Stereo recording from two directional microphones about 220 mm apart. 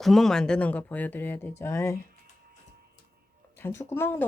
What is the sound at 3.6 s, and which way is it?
Speech, 10° left (ahead or behind).